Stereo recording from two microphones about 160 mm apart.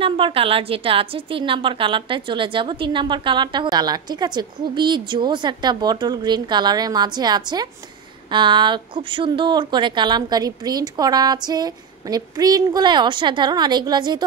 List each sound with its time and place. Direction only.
0.0 s a woman's voice: 35° right (ahead or behind)